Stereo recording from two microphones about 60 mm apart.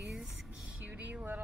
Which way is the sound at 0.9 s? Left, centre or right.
Right.